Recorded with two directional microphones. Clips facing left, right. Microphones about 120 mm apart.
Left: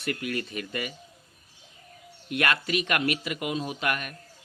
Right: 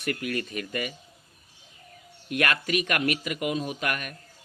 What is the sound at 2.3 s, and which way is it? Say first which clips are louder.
Speech: right 1 dB; 25° left (ahead or behind).